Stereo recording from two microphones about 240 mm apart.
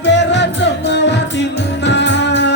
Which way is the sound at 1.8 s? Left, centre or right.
Left.